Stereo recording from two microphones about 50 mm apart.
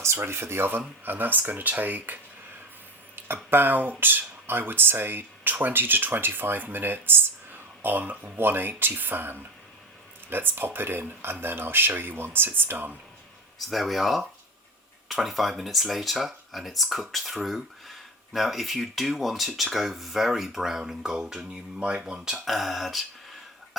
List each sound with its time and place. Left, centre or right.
0.2 s speech: right
1.0 s speech: right
3.2 s a sound: right
3.5 s speech: right
13.7 s speech: centre
22.4 s speech: centre